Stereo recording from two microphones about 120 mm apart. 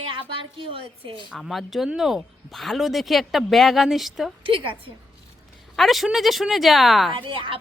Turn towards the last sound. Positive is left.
turn(degrees=-45)  # may be behind; listen again after turning